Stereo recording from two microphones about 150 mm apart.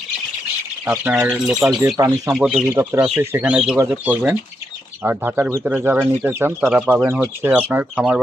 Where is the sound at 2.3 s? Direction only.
Centre (ahead or behind).